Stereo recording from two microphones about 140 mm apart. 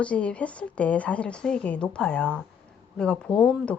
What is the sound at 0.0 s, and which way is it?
A woman's voice, 10° left (ahead or behind).